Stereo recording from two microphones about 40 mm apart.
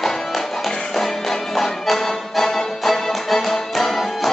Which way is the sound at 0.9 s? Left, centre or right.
Centre.